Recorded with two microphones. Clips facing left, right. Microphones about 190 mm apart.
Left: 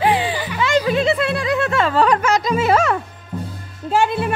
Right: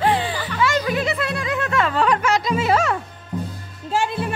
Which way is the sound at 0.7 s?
25° left (ahead or behind).